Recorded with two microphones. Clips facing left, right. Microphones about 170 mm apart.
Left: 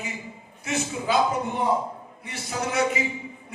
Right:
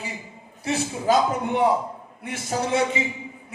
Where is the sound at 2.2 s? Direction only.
55° right (ahead or behind).